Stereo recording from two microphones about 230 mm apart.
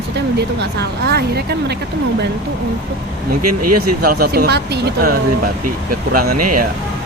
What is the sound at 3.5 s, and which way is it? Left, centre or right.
Speech, right.